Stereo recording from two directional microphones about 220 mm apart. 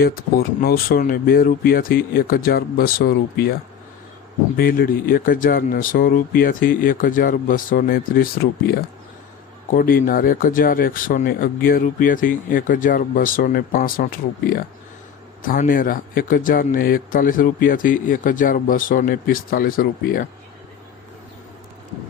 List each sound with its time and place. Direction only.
0.0 s speech: 45° left (ahead or behind)